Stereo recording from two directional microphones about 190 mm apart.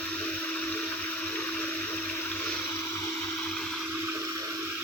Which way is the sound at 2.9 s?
15° left (ahead or behind).